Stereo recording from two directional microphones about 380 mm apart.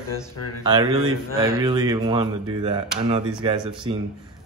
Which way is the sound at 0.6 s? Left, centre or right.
Centre.